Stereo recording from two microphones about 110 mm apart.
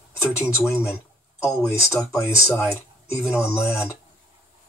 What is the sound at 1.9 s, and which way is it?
Speech, 25° left (ahead or behind).